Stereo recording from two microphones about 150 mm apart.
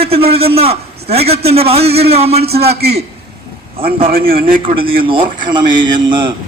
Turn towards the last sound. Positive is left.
turn(degrees=-30)  # may be behind; listen again after turning